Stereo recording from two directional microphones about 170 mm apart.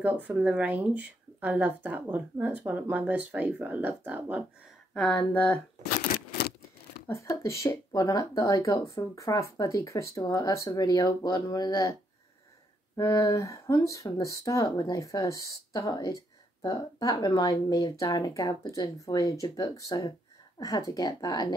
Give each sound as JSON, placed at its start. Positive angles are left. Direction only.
{"t": 0.0, "sound": "speech", "side_deg": -10}
{"t": 4.9, "sound": "speech", "side_deg": 5}
{"t": 5.8, "sound": "shuffling cards", "side_deg": 70}
{"t": 7.1, "sound": "speech", "side_deg": 15}
{"t": 12.9, "sound": "speech", "side_deg": 15}